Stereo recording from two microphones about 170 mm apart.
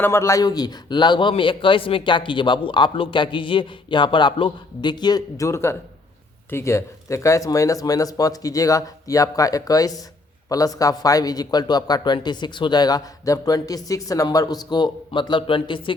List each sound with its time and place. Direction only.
0.0 s a man's voice: 15° left (ahead or behind)